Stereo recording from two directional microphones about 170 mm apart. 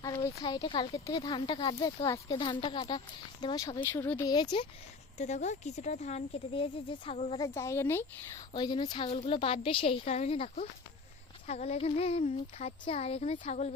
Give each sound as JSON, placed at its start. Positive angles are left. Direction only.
{"t": 0.0, "sound": "speech", "side_deg": 20}
{"t": 4.3, "sound": "speech", "side_deg": 25}
{"t": 5.1, "sound": "speech", "side_deg": 40}
{"t": 7.4, "sound": "speech", "side_deg": 15}
{"t": 8.5, "sound": "speech", "side_deg": 25}
{"t": 9.0, "sound": "speech", "side_deg": 35}